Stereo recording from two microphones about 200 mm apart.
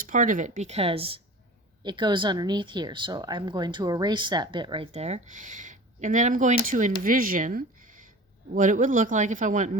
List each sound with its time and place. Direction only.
0.0 s speech: 40° right (ahead or behind)